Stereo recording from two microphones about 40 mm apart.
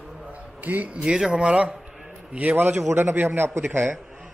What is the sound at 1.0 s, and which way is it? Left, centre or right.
Speech, centre.